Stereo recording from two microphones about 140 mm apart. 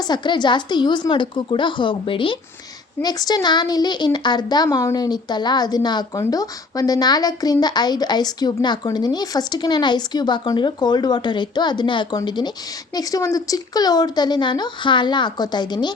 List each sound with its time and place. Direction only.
0.0 s speech: 30° left (ahead or behind)